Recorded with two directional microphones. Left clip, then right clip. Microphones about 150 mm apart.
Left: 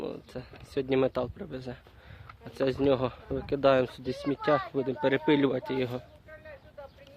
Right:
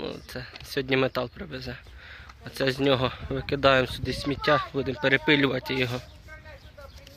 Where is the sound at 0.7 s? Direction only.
10° left (ahead or behind).